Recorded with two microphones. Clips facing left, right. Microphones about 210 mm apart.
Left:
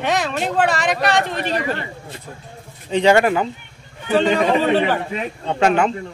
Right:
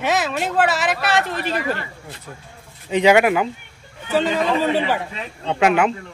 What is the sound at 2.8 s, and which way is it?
Speech, 10° right (ahead or behind).